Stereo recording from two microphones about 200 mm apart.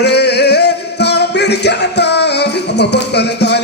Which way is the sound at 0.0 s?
55° left (ahead or behind).